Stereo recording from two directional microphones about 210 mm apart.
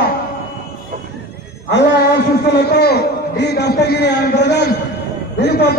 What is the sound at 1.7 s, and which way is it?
A man's voice, 55° left (ahead or behind).